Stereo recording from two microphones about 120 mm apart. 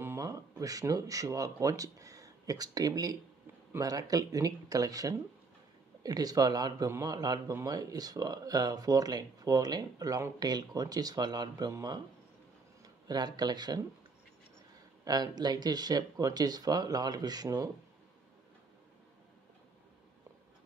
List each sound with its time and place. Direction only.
0.0 s speech: 25° right (ahead or behind)
15.0 s speech: 35° right (ahead or behind)